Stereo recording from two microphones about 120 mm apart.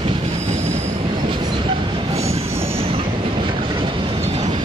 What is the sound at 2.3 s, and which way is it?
Train, 55° right (ahead or behind).